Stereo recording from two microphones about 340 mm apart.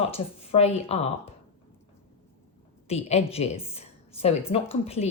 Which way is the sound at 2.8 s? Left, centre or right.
Centre.